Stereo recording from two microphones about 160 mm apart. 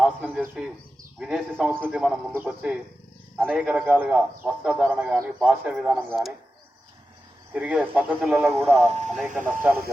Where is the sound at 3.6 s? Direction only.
10° right (ahead or behind).